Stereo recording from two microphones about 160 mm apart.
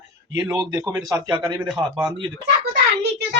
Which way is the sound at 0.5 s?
25° right (ahead or behind).